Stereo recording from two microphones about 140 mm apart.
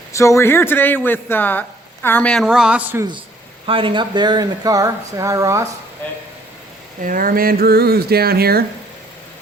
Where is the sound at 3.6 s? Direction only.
40° right (ahead or behind); by 5.6 s 25° right (ahead or behind).